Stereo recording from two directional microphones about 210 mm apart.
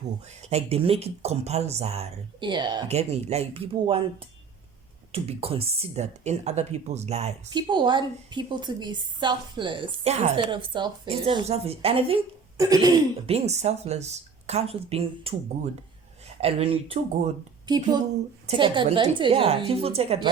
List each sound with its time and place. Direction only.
0.3 s speech: 30° right (ahead or behind)
5.1 s speech: 25° right (ahead or behind)
12.5 s speech: 15° right (ahead or behind)
16.4 s speech: 30° right (ahead or behind)